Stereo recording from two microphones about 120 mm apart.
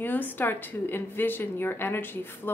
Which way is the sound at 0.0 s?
15° left (ahead or behind).